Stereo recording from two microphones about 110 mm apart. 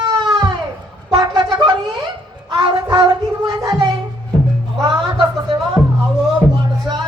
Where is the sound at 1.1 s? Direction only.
35° right (ahead or behind).